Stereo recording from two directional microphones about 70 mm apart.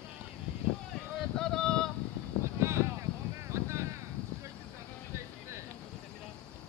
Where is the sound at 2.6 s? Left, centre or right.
Right.